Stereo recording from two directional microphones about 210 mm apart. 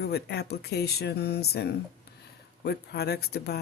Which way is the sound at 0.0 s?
50° left (ahead or behind).